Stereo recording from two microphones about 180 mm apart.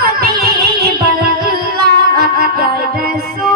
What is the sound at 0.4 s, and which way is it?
Music, 55° right (ahead or behind).